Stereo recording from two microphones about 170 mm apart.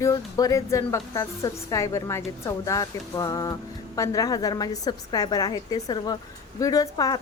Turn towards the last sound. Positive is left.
turn(degrees=20)  # may be behind; listen again after turning